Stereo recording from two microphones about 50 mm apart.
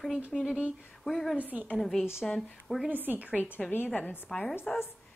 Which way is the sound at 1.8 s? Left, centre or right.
Centre.